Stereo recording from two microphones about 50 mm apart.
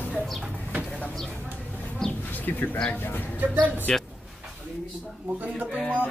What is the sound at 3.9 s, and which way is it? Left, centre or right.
Speech, centre.